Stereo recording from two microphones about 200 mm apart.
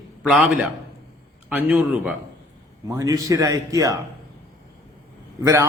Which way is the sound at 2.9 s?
15° right (ahead or behind).